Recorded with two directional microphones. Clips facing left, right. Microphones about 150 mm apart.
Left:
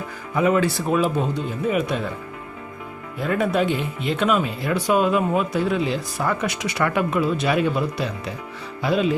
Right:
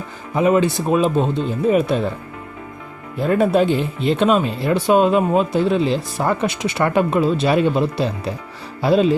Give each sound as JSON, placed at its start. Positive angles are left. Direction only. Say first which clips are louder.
{"t": 0.3, "sound": "speech", "louder": "right 3 dB", "side_deg": -20}
{"t": 3.2, "sound": "speech", "louder": "right 5 dB", "side_deg": -30}